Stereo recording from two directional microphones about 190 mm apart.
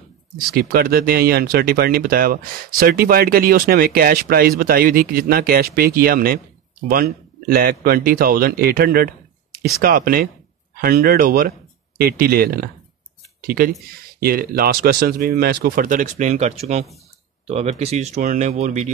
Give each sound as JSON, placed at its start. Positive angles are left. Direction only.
{"t": 0.6, "sound": "speech", "side_deg": -50}